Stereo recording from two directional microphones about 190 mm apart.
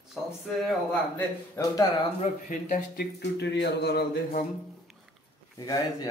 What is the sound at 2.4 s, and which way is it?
Speech, 45° left (ahead or behind).